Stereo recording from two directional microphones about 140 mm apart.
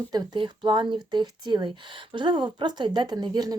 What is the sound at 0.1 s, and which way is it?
Speech, 30° right (ahead or behind).